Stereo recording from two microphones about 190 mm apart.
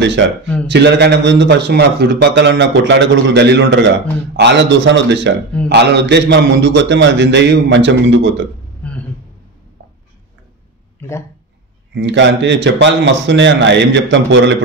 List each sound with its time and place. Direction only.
0.0 s a man's voice: 70° right (ahead or behind)
8.8 s a sound: 5° left (ahead or behind)
11.0 s speech: 15° left (ahead or behind)
11.9 s a man's voice: 70° right (ahead or behind)